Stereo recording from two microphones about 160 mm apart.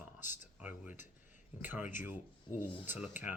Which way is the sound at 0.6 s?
10° right (ahead or behind).